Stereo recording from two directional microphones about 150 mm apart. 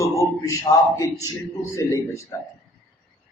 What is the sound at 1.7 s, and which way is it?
Speech, 20° left (ahead or behind).